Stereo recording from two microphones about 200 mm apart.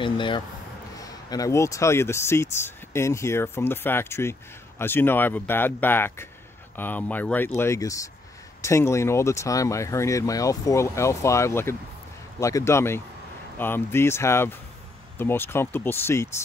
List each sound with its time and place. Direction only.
0.0 s speech: 25° left (ahead or behind)